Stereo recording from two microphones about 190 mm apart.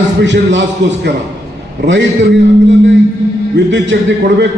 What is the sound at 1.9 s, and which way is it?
Speech, 70° right (ahead or behind).